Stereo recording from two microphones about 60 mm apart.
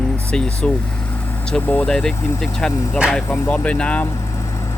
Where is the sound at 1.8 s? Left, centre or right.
Centre.